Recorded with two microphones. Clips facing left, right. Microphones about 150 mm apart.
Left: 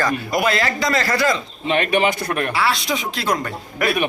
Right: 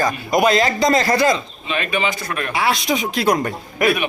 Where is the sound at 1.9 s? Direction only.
55° left (ahead or behind).